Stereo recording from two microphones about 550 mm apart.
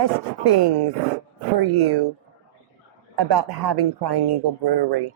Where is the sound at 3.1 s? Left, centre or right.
Right.